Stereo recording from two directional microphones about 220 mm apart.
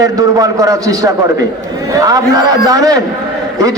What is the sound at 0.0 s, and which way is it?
A man's voice, 15° right (ahead or behind).